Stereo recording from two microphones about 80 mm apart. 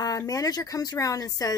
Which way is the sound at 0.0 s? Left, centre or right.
Left.